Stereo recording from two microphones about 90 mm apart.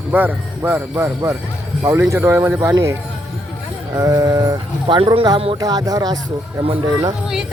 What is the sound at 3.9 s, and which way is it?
Speech, 45° right (ahead or behind).